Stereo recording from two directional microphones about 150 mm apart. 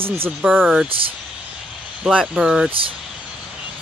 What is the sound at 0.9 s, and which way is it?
Speech, 35° right (ahead or behind).